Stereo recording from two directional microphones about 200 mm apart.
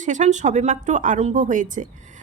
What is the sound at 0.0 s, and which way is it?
Speech, 35° right (ahead or behind).